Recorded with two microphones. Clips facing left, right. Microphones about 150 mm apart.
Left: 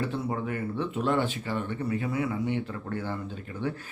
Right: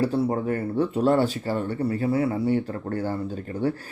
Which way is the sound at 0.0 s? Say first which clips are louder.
Right 7 dB; 35° right (ahead or behind).